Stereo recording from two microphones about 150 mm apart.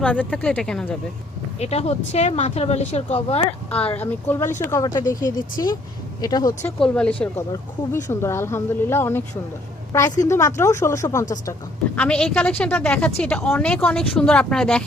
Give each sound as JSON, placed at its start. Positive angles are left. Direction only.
{"t": 0.0, "sound": "a woman's voice", "side_deg": 10}
{"t": 1.5, "sound": "speech", "side_deg": 45}
{"t": 3.9, "sound": "a woman's voice", "side_deg": 10}
{"t": 6.7, "sound": "speech", "side_deg": 5}
{"t": 8.0, "sound": "a woman's voice", "side_deg": 15}
{"t": 11.9, "sound": "a woman's voice", "side_deg": 5}